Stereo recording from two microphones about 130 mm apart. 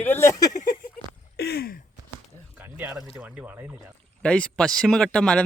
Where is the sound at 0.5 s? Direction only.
90° left.